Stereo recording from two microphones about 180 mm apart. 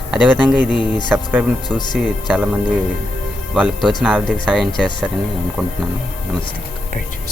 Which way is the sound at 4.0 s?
Centre (ahead or behind).